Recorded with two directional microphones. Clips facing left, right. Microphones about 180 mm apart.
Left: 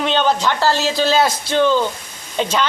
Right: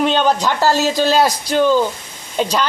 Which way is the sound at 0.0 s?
5° right (ahead or behind).